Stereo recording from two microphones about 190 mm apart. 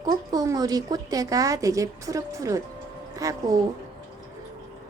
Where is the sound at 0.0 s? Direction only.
20° right (ahead or behind).